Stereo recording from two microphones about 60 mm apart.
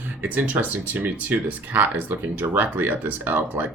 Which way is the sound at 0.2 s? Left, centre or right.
Right.